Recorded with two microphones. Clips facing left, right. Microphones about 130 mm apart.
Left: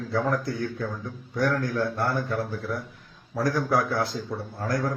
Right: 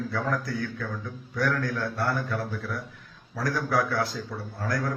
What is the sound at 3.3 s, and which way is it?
A man's voice, 25° left (ahead or behind).